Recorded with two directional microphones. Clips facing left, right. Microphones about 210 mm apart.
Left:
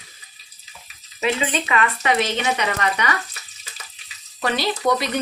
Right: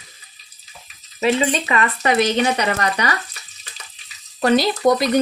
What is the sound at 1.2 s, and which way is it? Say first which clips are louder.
Speech: right 4 dB; 35° right (ahead or behind).